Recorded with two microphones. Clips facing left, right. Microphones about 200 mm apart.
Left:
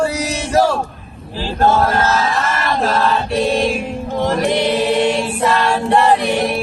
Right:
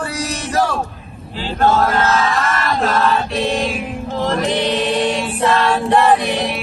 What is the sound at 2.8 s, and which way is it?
Chant, 30° left (ahead or behind).